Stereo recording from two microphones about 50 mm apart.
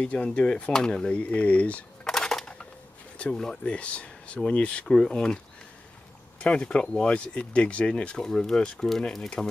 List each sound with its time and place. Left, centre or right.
0.0 s speech: left
1.1 s speech: left
2.0 s a sound: centre
3.2 s speech: centre
4.8 s speech: centre
6.4 s speech: centre